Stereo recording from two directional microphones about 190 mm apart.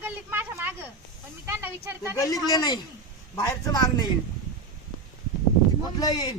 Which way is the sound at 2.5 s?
20° left (ahead or behind).